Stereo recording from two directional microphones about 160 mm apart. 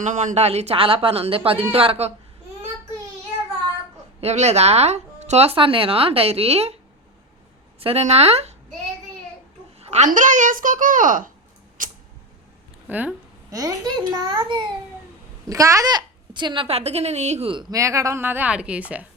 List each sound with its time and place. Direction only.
0.0 s speech: 50° right (ahead or behind)
4.2 s speech: 45° right (ahead or behind)
7.8 s speech: 40° right (ahead or behind)
9.8 s a sound: 45° right (ahead or behind)
10.1 s a child's voice: 55° right (ahead or behind)
11.8 s a sound: 55° right (ahead or behind)
12.9 s speech: 10° right (ahead or behind)
13.5 s a child's voice: 20° right (ahead or behind); by 17.5 s 45° right (ahead or behind)
17.5 s speech: 25° right (ahead or behind); by 19.0 s 10° right (ahead or behind)